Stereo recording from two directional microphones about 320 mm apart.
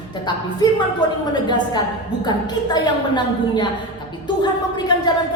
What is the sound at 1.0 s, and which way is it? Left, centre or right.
A woman's voice, centre.